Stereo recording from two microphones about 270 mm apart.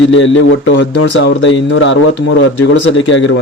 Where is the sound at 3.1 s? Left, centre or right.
Left.